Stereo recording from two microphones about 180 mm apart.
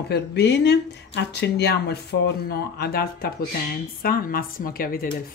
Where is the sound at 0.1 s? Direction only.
70° left (ahead or behind).